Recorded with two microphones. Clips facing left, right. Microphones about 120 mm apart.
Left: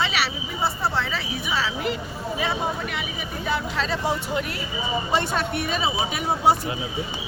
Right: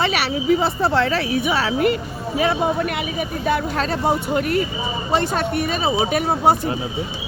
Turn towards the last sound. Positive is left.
turn(degrees=-50)  # may be behind; listen again after turning